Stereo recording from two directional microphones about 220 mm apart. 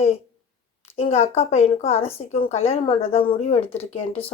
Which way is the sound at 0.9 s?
30° left (ahead or behind).